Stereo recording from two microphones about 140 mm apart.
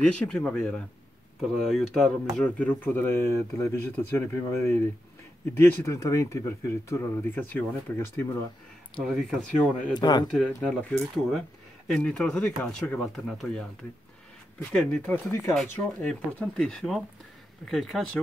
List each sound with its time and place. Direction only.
0.0 s speech: 10° left (ahead or behind)
9.0 s speech: centre (ahead or behind)
9.9 s speech: 30° left (ahead or behind)
10.3 s speech: 5° left (ahead or behind)
14.7 s speech: 10° left (ahead or behind)